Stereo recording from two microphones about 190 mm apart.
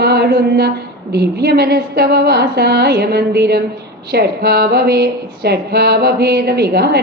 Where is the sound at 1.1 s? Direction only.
55° right (ahead or behind).